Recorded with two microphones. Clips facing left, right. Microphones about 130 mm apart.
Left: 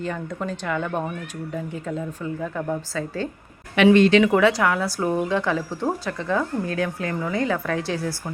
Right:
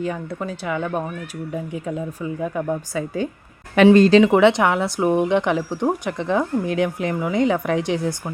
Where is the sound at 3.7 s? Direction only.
40° right (ahead or behind).